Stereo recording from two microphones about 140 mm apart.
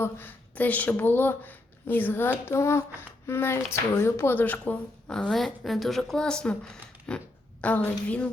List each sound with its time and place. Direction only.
0.0 s speech: 15° left (ahead or behind)